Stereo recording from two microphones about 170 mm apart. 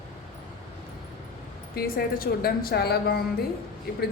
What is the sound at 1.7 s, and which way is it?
A woman's voice, 60° left (ahead or behind).